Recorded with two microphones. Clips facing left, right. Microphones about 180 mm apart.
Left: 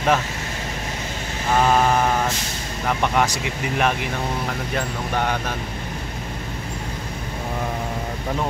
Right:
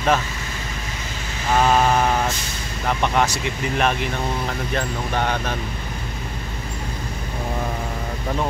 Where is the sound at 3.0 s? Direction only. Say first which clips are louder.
Right 1 dB; 10° left (ahead or behind).